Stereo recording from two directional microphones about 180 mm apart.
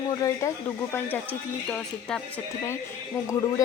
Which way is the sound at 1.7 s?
5° left (ahead or behind).